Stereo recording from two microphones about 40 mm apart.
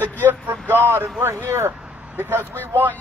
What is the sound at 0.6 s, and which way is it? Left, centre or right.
Speech, right.